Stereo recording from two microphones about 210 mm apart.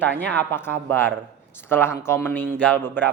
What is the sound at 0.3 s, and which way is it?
Speech, 10° left (ahead or behind).